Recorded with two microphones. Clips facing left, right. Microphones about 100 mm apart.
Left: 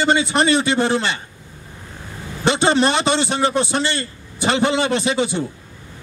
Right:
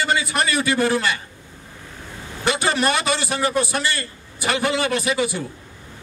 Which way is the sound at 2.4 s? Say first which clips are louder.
Left 4 dB; 25° left (ahead or behind).